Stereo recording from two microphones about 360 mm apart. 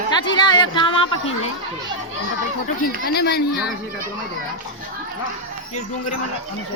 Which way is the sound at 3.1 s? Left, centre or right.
Left.